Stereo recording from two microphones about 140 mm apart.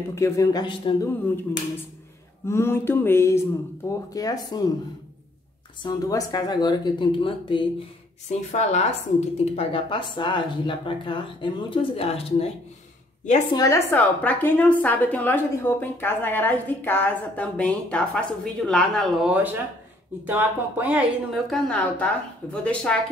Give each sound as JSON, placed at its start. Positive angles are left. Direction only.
{"t": 0.1, "sound": "speech", "side_deg": 20}
{"t": 1.0, "sound": "a woman's voice", "side_deg": 15}
{"t": 2.4, "sound": "a woman's voice", "side_deg": 20}
{"t": 5.8, "sound": "speech", "side_deg": 25}
{"t": 8.3, "sound": "speech", "side_deg": 55}
{"t": 9.4, "sound": "speech", "side_deg": 45}
{"t": 13.5, "sound": "a woman's voice", "side_deg": 25}
{"t": 19.2, "sound": "speech", "side_deg": -10}
{"t": 21.3, "sound": "a woman's voice", "side_deg": 5}